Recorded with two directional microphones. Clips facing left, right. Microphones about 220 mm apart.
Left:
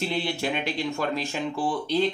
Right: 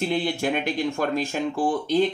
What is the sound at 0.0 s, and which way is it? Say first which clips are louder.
Speech: right 4 dB; 50° right (ahead or behind).